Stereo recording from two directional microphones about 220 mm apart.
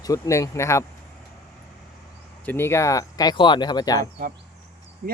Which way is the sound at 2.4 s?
10° left (ahead or behind).